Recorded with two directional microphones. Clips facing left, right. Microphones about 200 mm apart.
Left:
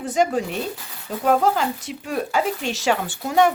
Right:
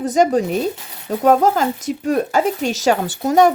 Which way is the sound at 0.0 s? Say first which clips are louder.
Right 5 dB; 40° right (ahead or behind).